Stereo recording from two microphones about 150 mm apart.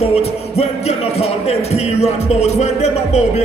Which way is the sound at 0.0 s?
40° left (ahead or behind).